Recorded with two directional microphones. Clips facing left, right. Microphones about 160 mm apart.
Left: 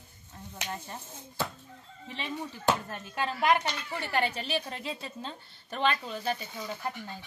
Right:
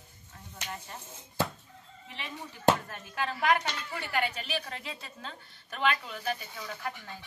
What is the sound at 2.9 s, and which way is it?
A woman's voice, 25° left (ahead or behind).